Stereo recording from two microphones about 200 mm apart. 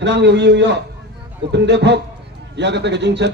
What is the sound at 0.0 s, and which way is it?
A man's voice, 60° right (ahead or behind).